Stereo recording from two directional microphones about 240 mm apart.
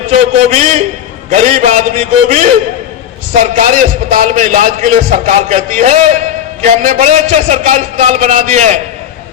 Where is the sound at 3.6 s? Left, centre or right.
Right.